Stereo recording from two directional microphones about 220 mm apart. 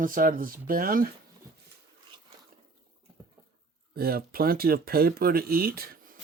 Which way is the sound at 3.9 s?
45° right (ahead or behind).